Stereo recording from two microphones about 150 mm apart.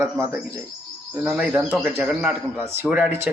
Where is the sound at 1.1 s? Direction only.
5° right (ahead or behind).